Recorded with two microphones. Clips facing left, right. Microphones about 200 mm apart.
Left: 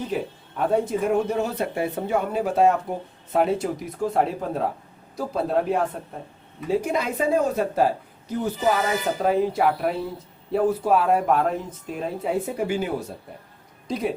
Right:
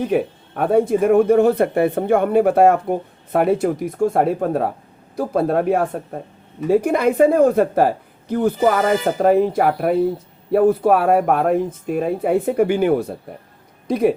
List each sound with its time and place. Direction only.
0.0 s speech: 60° right (ahead or behind)